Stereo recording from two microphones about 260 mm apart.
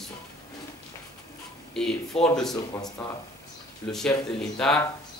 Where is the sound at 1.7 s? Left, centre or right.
Centre.